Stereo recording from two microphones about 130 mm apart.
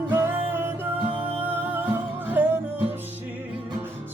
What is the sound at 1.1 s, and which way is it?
Music, 45° right (ahead or behind).